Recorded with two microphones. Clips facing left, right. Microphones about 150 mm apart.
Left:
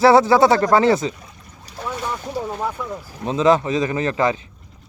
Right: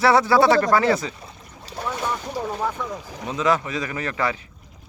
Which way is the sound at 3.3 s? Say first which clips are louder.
Left 6 dB; 25° left (ahead or behind).